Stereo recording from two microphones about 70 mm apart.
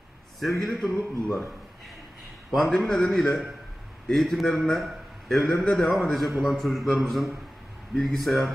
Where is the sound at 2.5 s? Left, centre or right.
Centre.